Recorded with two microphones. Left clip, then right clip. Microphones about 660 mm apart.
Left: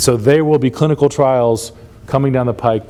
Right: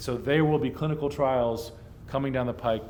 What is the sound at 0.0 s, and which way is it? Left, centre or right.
Speech, left.